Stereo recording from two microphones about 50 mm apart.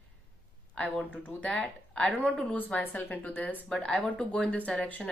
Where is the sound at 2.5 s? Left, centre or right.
Left.